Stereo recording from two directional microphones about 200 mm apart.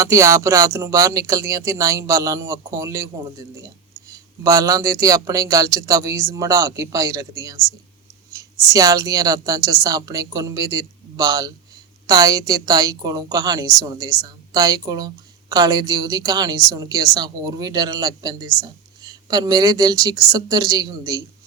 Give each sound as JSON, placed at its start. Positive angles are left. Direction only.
{"t": 0.0, "sound": "a woman's voice", "side_deg": -15}